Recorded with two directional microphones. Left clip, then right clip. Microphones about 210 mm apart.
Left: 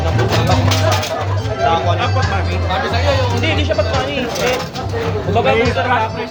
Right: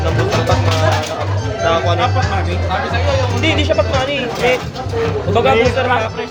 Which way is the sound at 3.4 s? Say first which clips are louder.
Right 2 dB; 55° right (ahead or behind).